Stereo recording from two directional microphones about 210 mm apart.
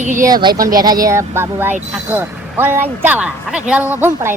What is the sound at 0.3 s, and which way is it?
Speech, 20° right (ahead or behind).